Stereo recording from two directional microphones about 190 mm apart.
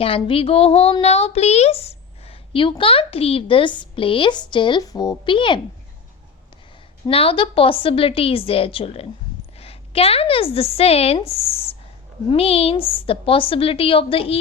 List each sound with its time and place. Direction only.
0.0 s a woman's voice: 30° left (ahead or behind)
7.1 s a woman's voice: 30° left (ahead or behind)